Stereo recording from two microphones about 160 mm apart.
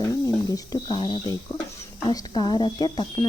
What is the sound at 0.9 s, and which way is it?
Speech, 35° left (ahead or behind).